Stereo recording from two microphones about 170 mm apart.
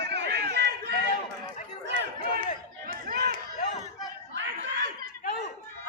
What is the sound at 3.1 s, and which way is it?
Run, 65° right (ahead or behind).